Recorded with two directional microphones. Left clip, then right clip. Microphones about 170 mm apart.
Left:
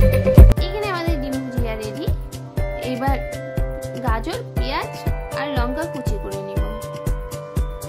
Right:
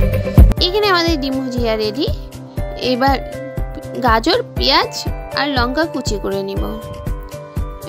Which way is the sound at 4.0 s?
50° right (ahead or behind).